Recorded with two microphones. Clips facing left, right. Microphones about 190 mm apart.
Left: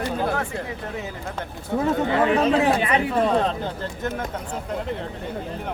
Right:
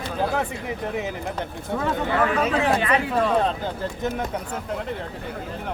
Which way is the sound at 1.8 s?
25° left (ahead or behind).